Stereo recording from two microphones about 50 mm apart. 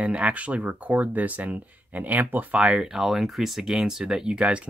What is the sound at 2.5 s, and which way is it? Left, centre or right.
Speech, centre.